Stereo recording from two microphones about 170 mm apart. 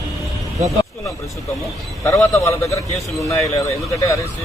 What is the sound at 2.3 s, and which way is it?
A man's voice, 20° left (ahead or behind).